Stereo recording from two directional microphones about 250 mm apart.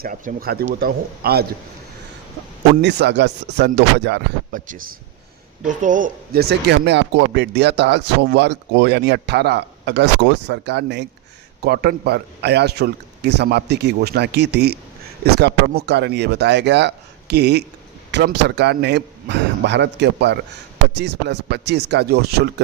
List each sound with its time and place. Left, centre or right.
0.0 s a man's voice: right
2.8 s a man's voice: right